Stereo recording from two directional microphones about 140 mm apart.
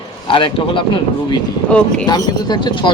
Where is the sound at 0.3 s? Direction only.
35° left (ahead or behind).